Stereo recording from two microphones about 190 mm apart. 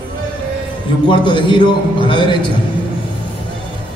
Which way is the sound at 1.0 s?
25° left (ahead or behind).